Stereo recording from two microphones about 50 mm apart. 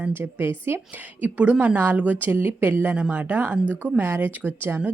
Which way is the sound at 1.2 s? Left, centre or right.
Right.